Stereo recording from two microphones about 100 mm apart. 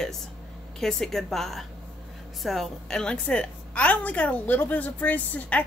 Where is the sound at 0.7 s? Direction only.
5° left (ahead or behind).